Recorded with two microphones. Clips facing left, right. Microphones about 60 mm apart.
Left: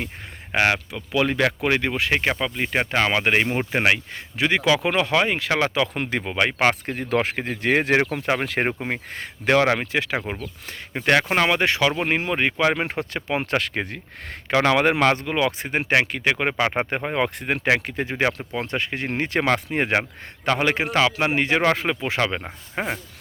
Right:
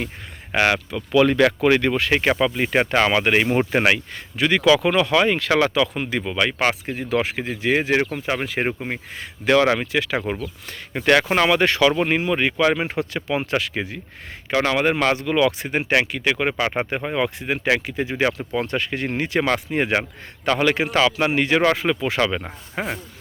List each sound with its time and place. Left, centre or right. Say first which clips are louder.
0.5 s speech: right 1 dB; left
2.3 s speech: right 5 dB; centre
3.1 s speech: right 2 dB; centre
3.4 s speech: right 5 dB; centre
3.7 s speech: right 2 dB; centre
3.9 s a man's voice: right 1 dB; left
5.9 s speech: even; left
6.1 s speech: even; left
9.5 s speech: right 2 dB; left
10.9 s a man's voice: right 2 dB; centre
12.1 s speech: right 2 dB; left
13.4 s speech: right 1 dB; left
15.0 s a man's voice: right 1 dB; left
19.1 s a man's voice: even; left